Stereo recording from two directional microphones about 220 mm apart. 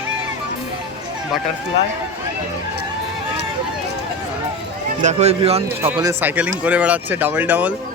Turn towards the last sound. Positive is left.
turn(degrees=-5)  # may be behind; listen again after turning